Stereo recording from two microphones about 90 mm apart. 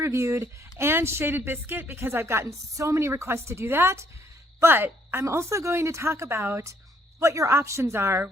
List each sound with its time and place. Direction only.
0.0 s speech: 30° right (ahead or behind)